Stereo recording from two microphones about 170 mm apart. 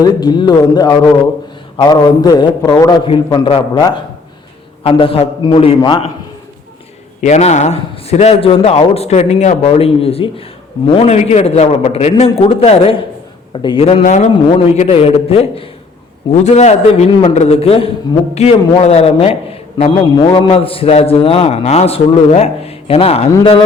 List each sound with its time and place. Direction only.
0.0 s a man's voice: 25° left (ahead or behind)
7.2 s a man's voice: 45° left (ahead or behind)
14.0 s a man's voice: 45° left (ahead or behind)